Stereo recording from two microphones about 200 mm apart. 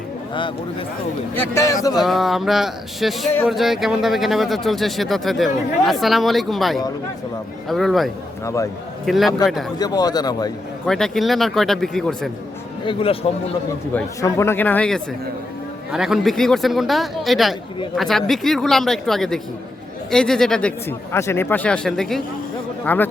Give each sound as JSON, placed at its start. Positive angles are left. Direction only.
{"t": 0.3, "sound": "a man's voice", "side_deg": 25}
{"t": 2.0, "sound": "speech", "side_deg": 0}
{"t": 9.7, "sound": "a man's voice", "side_deg": 20}
{"t": 10.8, "sound": "speech", "side_deg": 0}
{"t": 12.8, "sound": "a man's voice", "side_deg": 25}
{"t": 13.9, "sound": "a man's voice", "side_deg": 15}